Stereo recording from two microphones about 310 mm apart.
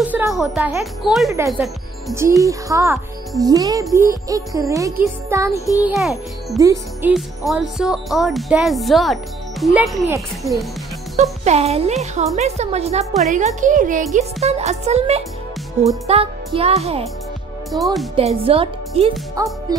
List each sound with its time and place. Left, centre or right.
0.1 s speech: centre
11.4 s speech: centre